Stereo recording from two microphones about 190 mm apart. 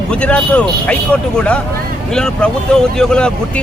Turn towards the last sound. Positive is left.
turn(degrees=5)  # may be behind; listen again after turning